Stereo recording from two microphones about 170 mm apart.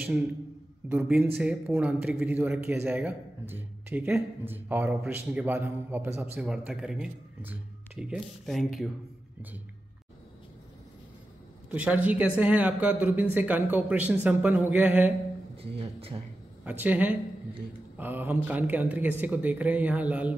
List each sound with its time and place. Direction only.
0.8 s speech: 10° right (ahead or behind)
11.7 s speech: 10° right (ahead or behind)
15.5 s speech: 35° right (ahead or behind)
16.6 s speech: 10° right (ahead or behind)